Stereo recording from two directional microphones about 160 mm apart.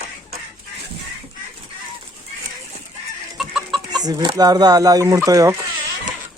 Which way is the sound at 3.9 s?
25° right (ahead or behind).